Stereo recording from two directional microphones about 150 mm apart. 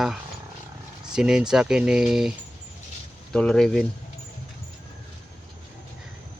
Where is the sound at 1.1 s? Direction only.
5° right (ahead or behind).